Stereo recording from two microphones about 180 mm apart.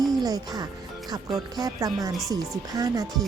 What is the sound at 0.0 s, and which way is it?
Music, 20° right (ahead or behind).